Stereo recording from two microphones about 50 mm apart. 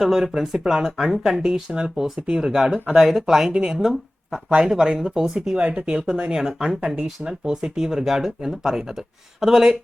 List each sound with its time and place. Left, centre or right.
0.0 s speech: centre
3.5 s speech: centre
3.8 s speech: centre